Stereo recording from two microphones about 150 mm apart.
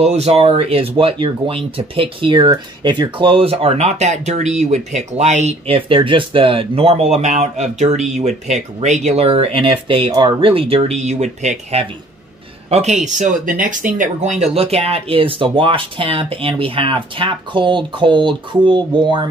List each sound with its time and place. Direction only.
0.0 s speech: 45° right (ahead or behind)